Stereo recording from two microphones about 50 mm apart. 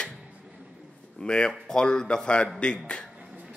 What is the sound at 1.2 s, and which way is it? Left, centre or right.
A man's voice, centre.